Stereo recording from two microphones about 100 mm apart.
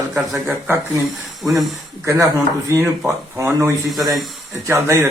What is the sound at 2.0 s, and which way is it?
Speech, 30° right (ahead or behind).